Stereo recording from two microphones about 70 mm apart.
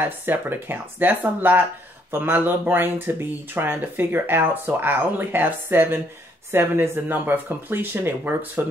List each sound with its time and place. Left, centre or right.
0.0 s speech: right